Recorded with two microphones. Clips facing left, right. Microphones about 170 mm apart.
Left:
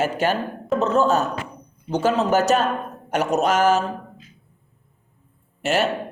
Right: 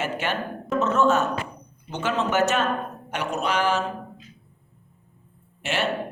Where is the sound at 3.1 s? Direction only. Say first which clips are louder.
Left 6 dB; 40° left (ahead or behind).